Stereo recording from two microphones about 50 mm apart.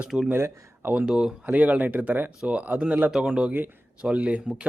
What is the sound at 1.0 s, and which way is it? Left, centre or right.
Speech, centre.